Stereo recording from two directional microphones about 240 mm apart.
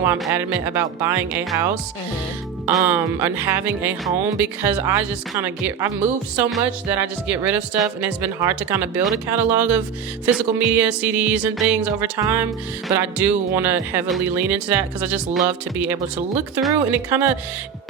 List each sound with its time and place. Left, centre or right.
0.0 s speech: centre